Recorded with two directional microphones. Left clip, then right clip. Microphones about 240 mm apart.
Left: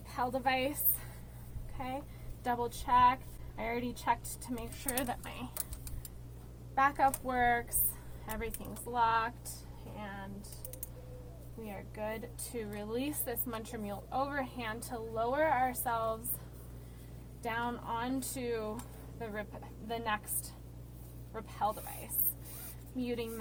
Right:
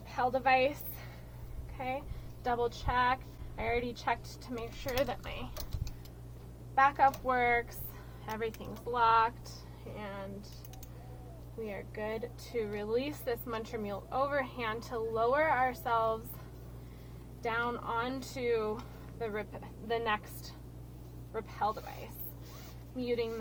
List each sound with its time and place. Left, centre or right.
0.1 s a woman's voice: centre
2.4 s a woman's voice: centre
6.7 s a woman's voice: centre
11.6 s a woman's voice: centre
17.4 s a woman's voice: centre
23.0 s a woman's voice: centre